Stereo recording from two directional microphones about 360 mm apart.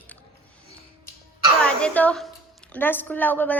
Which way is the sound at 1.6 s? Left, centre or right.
Centre.